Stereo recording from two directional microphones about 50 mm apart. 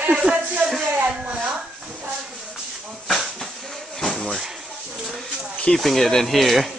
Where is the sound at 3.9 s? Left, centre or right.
Centre.